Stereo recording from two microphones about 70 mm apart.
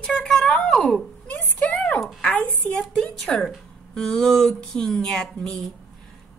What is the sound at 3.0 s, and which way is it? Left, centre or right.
A woman's voice, centre.